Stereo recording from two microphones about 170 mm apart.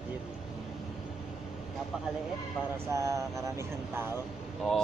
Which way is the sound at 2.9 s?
20° right (ahead or behind).